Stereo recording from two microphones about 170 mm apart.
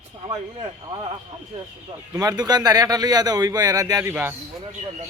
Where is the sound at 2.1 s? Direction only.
25° right (ahead or behind).